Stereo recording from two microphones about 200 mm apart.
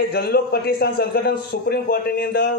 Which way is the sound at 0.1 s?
50° left (ahead or behind).